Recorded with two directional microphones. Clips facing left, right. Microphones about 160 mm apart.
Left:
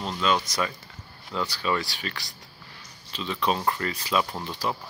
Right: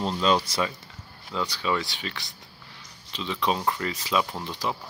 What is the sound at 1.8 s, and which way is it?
Speech, 20° right (ahead or behind).